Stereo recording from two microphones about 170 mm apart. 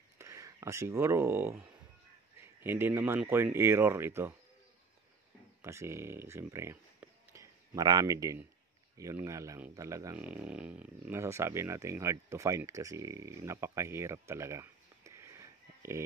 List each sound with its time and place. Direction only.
0.2 s speech: 15° right (ahead or behind)
5.6 s speech: 15° right (ahead or behind)